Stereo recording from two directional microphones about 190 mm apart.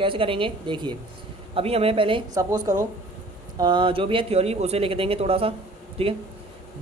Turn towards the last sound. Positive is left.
turn(degrees=-30)  # may be behind; listen again after turning